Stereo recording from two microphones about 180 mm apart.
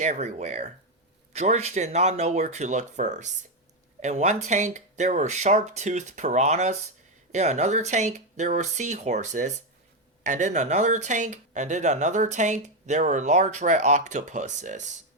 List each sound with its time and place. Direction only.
0.0 s speech: 40° right (ahead or behind)